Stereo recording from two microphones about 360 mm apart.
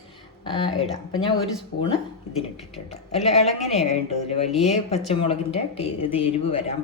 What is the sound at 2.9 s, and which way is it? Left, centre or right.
Speech, centre.